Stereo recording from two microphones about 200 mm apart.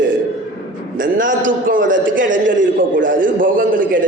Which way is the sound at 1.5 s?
45° right (ahead or behind).